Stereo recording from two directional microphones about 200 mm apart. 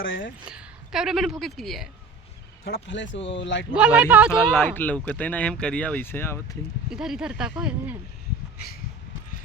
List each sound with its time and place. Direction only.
0.0 s a woman's voice: 75° left (ahead or behind)
0.4 s a woman's voice: 5° right (ahead or behind)
2.6 s speech: 60° left (ahead or behind)
3.8 s speech: 5° right (ahead or behind)
4.5 s speech: 10° left (ahead or behind)
6.9 s speech: 5° right (ahead or behind)